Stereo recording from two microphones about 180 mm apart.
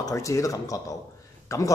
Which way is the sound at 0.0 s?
15° left (ahead or behind).